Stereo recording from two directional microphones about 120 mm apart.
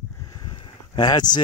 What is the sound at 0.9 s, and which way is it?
Speech, 35° left (ahead or behind).